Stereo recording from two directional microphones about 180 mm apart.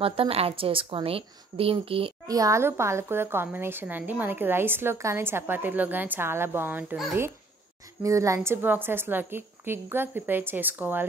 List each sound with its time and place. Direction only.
0.0 s a woman's voice: 30° right (ahead or behind)
2.2 s a woman's voice: 20° right (ahead or behind)